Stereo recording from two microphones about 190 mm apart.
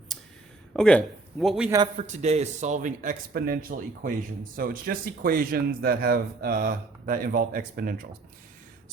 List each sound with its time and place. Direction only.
0.7 s a man's voice: 5° left (ahead or behind)
2.0 s speech: 35° right (ahead or behind); by 8.0 s 50° right (ahead or behind)